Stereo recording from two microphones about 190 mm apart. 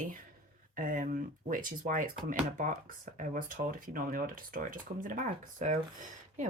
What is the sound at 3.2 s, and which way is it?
Speech, 45° right (ahead or behind).